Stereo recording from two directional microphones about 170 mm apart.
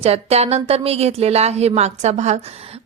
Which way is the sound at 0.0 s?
40° right (ahead or behind).